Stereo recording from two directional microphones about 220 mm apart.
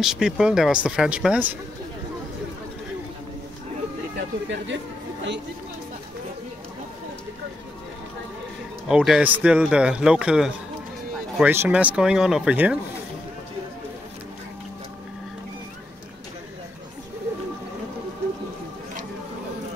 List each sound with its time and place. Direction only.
0.0 s a man's voice: centre (ahead or behind)
4.2 s speech: 55° right (ahead or behind)
8.8 s a man's voice: centre (ahead or behind)